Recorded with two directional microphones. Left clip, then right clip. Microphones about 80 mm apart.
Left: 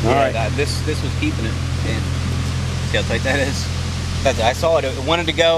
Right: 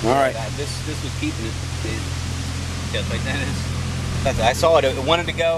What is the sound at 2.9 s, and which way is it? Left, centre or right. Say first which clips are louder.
Speech: left 7 dB; left.